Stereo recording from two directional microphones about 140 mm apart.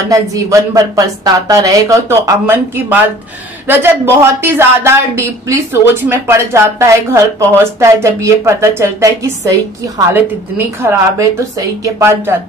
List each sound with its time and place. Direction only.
0.1 s speech: 25° right (ahead or behind)